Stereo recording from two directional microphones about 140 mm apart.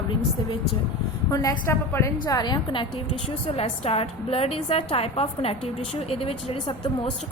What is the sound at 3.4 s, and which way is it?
A woman's voice, 45° left (ahead or behind).